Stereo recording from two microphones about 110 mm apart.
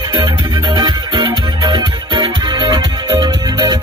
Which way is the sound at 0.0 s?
40° right (ahead or behind).